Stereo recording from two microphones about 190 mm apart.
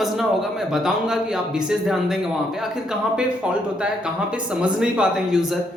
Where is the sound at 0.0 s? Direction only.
Centre (ahead or behind).